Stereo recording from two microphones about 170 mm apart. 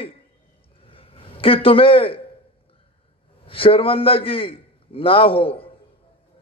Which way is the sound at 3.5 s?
30° left (ahead or behind).